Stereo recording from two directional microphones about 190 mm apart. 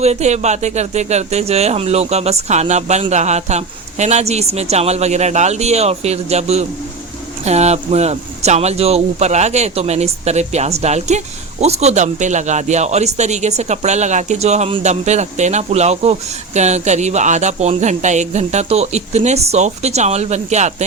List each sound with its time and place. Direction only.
0.0 s speech: 35° right (ahead or behind)